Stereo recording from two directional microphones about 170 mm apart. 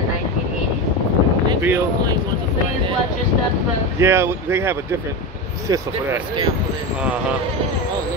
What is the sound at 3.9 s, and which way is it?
Speech, 15° right (ahead or behind).